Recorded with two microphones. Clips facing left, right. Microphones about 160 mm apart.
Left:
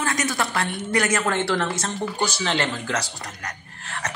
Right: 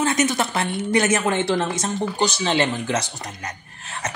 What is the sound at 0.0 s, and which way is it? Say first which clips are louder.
A woman's voice: right 5 dB; 20° right (ahead or behind).